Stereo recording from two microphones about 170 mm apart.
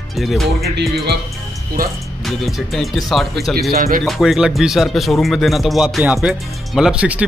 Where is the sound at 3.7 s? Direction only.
60° right (ahead or behind).